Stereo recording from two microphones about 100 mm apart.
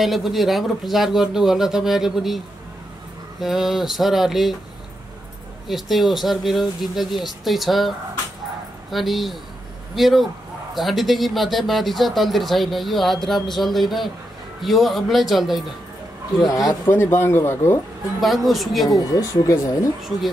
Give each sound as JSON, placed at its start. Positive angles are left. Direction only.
{"t": 0.0, "sound": "speech", "side_deg": 0}
{"t": 5.7, "sound": "speech", "side_deg": 0}
{"t": 8.9, "sound": "speech", "side_deg": 0}
{"t": 16.4, "sound": "speech", "side_deg": 40}
{"t": 16.8, "sound": "speech", "side_deg": 20}
{"t": 18.2, "sound": "speech", "side_deg": 0}
{"t": 18.9, "sound": "speech", "side_deg": 35}